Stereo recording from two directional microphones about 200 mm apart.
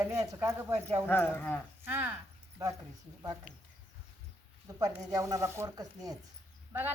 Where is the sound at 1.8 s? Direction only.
10° right (ahead or behind).